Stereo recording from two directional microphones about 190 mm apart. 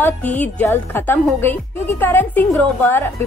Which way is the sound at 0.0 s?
10° left (ahead or behind).